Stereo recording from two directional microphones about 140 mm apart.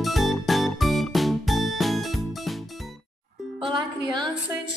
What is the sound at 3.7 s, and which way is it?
Music, 30° right (ahead or behind).